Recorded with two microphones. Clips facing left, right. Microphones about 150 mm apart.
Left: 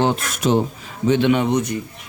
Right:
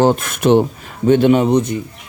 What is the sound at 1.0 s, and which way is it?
Speech, 45° right (ahead or behind).